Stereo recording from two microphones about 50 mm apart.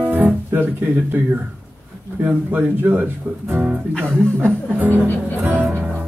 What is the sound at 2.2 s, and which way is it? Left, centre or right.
Speech, right.